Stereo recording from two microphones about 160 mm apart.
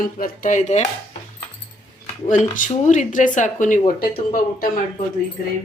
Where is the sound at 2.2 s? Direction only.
50° left (ahead or behind).